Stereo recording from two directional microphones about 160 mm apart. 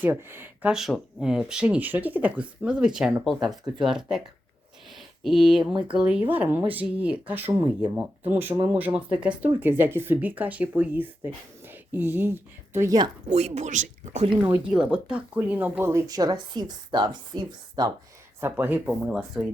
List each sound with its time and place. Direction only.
0.0 s speech: 15° right (ahead or behind)
4.9 s a sound: centre (ahead or behind)
5.9 s speech: 5° right (ahead or behind)
8.5 s speech: 35° right (ahead or behind)
8.8 s speech: 10° right (ahead or behind)
13.2 s speech: 45° right (ahead or behind)
14.3 s speech: 10° right (ahead or behind)
18.3 s speech: 10° right (ahead or behind)